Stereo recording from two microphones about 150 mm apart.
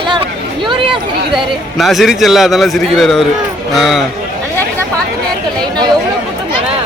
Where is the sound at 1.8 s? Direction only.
Centre (ahead or behind).